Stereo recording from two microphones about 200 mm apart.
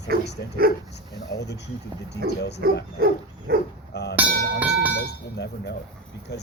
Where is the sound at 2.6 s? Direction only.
55° right (ahead or behind).